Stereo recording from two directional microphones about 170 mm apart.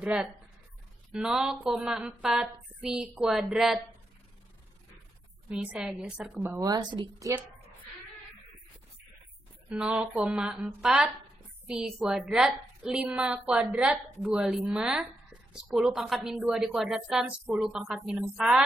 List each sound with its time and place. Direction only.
0.0 s a woman's voice: 5° right (ahead or behind)
5.5 s a woman's voice: 5° right (ahead or behind); by 7.3 s 25° right (ahead or behind)
9.7 s a woman's voice: 5° right (ahead or behind)